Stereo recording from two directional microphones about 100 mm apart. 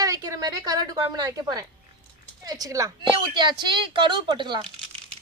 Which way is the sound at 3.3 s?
50° right (ahead or behind).